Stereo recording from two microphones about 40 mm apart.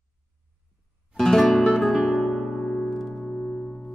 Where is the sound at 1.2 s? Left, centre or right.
Centre.